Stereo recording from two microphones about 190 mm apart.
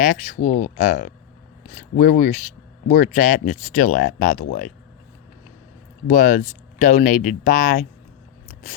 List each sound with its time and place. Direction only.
0.0 s speech: 40° left (ahead or behind)
6.1 s speech: 40° left (ahead or behind)